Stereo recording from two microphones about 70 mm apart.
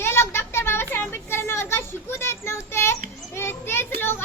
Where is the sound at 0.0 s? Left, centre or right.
Left.